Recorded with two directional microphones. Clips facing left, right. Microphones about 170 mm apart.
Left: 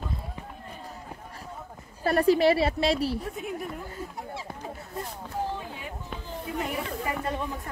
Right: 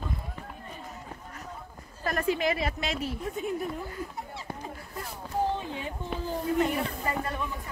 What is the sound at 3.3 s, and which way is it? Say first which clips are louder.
Speech: right 3 dB; centre (ahead or behind).